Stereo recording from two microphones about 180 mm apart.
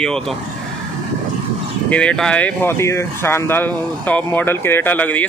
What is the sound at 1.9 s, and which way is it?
Speech, 5° left (ahead or behind).